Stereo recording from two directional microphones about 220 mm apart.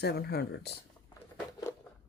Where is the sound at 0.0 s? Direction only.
45° left (ahead or behind).